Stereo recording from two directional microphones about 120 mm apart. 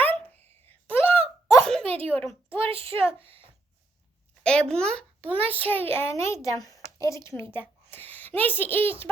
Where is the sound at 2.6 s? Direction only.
55° right (ahead or behind).